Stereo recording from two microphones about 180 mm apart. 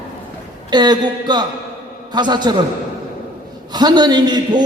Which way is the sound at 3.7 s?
25° right (ahead or behind).